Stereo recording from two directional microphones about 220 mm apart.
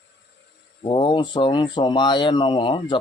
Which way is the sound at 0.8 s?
20° left (ahead or behind).